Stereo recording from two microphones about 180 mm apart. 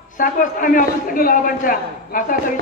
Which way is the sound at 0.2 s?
50° left (ahead or behind).